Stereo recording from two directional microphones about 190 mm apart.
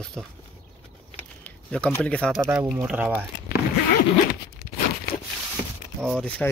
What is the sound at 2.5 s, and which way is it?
Speech, 10° right (ahead or behind).